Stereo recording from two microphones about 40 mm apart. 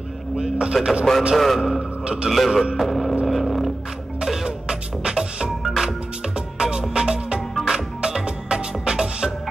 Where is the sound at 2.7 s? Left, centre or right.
Centre.